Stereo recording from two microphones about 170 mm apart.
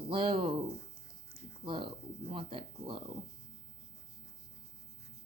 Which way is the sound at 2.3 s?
30° right (ahead or behind).